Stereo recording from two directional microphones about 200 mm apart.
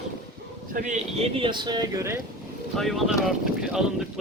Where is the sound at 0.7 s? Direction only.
35° right (ahead or behind); by 2.2 s 15° right (ahead or behind).